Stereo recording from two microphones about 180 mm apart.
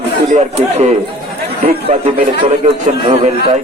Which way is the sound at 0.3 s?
40° right (ahead or behind).